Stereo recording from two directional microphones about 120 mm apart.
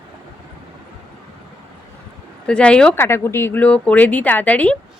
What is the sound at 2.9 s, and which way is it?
Speech, 20° left (ahead or behind).